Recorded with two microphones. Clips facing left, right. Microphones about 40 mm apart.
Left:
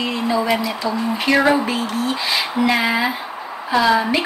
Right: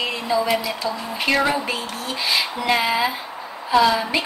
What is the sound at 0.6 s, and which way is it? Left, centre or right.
Speech, centre.